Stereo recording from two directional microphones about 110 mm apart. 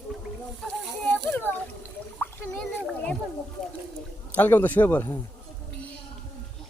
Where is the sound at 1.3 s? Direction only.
15° left (ahead or behind).